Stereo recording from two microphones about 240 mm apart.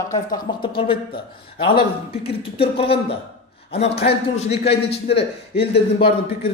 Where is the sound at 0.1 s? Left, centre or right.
Centre.